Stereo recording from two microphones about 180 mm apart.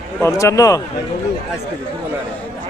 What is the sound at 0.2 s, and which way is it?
Speech, 15° left (ahead or behind).